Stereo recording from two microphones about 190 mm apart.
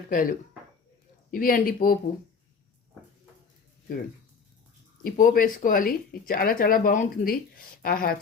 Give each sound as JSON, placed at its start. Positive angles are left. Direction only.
{"t": 0.1, "sound": "speech", "side_deg": 45}
{"t": 5.0, "sound": "speech", "side_deg": 45}